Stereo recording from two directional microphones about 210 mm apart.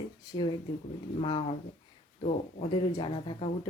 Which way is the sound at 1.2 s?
25° left (ahead or behind).